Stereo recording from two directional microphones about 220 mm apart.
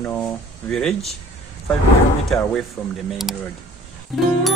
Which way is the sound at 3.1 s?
Centre (ahead or behind).